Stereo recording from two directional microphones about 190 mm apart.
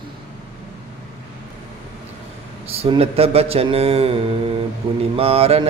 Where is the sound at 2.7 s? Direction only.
30° right (ahead or behind).